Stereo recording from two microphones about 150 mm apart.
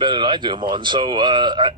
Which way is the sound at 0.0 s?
30° right (ahead or behind).